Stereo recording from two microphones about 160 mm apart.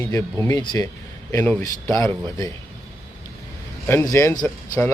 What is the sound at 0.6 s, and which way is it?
Speech, 30° left (ahead or behind).